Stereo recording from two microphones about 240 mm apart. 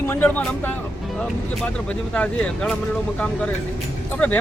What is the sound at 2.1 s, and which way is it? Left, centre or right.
Speech, centre.